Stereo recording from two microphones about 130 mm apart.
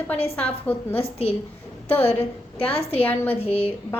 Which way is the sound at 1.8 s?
15° left (ahead or behind).